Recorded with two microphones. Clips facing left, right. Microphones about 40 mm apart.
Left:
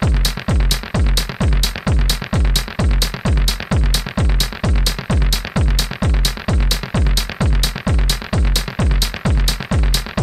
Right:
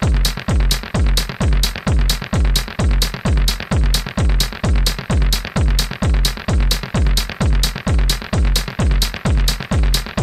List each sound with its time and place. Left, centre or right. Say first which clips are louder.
0.0 s music: even; right